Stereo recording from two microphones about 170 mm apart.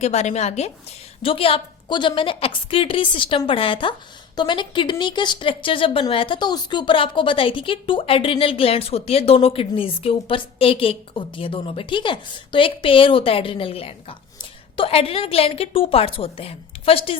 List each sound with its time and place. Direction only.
0.0 s speech: 40° left (ahead or behind)